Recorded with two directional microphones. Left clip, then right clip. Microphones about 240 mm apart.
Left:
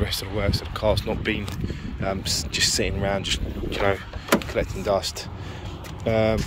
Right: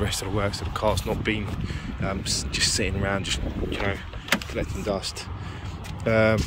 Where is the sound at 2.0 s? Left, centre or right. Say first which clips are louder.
Left 3 dB; centre.